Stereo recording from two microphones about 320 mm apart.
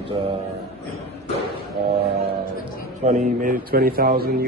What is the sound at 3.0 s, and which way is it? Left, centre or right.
A man's voice, right.